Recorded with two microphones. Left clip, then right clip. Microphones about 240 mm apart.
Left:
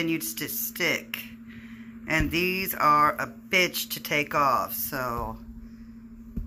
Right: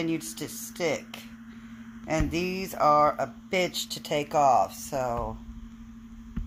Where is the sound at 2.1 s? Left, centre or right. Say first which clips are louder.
Left 3 dB; centre.